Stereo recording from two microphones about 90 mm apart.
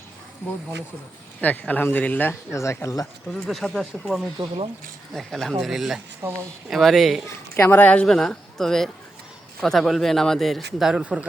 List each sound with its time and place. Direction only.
1.4 s speech: 15° left (ahead or behind)
2.5 s speech: 35° left (ahead or behind)
3.4 s a man's voice: 5° left (ahead or behind)
4.4 s speech: 90° right
5.1 s a man's voice: 5° left (ahead or behind)
6.2 s speech: 35° right (ahead or behind)
6.7 s a man's voice: centre (ahead or behind)
7.3 s speech: 25° left (ahead or behind)
8.0 s a man's voice: 5° left (ahead or behind)
11.0 s speech: 15° right (ahead or behind)